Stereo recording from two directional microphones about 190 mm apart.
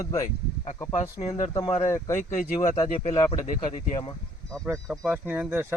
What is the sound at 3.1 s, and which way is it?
Speech, 25° left (ahead or behind).